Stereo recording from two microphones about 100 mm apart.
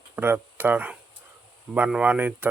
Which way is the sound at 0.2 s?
20° right (ahead or behind).